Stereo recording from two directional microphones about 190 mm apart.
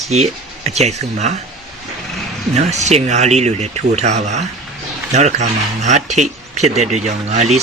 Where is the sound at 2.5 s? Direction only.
35° right (ahead or behind).